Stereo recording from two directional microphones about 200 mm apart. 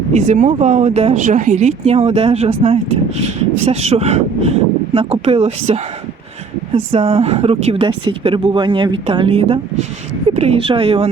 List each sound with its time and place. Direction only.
0.1 s speech: 35° right (ahead or behind)